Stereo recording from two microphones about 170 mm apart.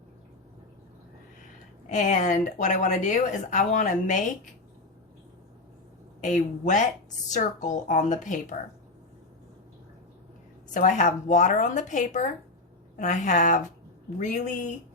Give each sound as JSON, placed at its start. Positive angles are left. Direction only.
{"t": 1.9, "sound": "a woman's voice", "side_deg": 45}
{"t": 6.2, "sound": "a woman's voice", "side_deg": 45}
{"t": 10.8, "sound": "a woman's voice", "side_deg": 50}